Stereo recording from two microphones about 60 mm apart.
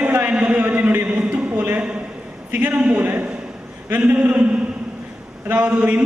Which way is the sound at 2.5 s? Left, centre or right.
Right.